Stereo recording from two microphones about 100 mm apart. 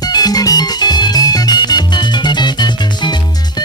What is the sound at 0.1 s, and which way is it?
Music, 40° left (ahead or behind).